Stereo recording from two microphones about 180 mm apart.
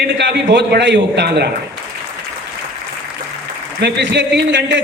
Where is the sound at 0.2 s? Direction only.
70° right (ahead or behind).